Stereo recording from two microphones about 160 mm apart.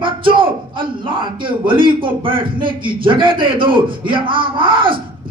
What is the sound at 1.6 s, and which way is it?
A man's voice, 30° right (ahead or behind).